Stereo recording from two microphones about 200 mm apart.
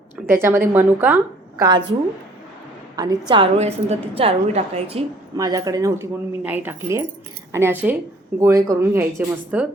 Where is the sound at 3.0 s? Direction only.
20° right (ahead or behind).